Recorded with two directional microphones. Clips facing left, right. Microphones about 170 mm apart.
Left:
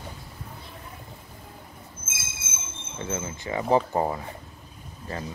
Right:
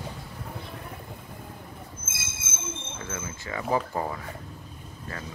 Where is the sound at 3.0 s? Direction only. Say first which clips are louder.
Left 4 dB; 25° left (ahead or behind).